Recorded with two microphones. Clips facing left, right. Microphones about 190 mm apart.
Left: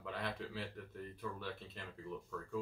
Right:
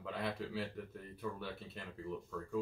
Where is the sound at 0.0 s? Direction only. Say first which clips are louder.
Right 3 dB; centre (ahead or behind).